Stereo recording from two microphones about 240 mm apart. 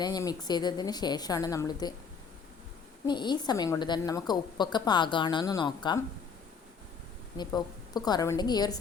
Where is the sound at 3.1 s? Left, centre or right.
Centre.